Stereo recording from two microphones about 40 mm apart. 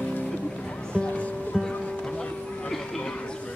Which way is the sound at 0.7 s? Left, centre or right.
Left.